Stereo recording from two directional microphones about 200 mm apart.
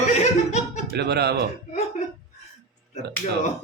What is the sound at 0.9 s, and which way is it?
Speech, 55° right (ahead or behind).